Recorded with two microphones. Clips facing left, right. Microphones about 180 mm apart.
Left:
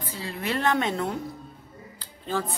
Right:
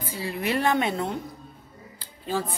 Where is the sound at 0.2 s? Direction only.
15° right (ahead or behind).